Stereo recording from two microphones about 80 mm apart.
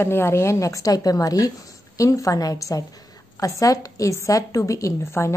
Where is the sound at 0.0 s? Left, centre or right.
Left.